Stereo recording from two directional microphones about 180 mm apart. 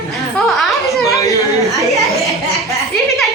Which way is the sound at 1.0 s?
15° left (ahead or behind).